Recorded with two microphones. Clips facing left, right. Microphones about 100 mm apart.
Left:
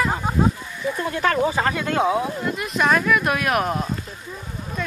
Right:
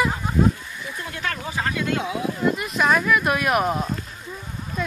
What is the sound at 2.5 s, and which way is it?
Speech, centre (ahead or behind).